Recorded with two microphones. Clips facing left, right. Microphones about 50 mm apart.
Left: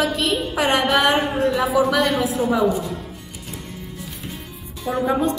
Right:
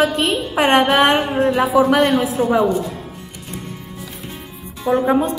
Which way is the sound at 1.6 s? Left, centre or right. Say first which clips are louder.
Right 4 dB; centre.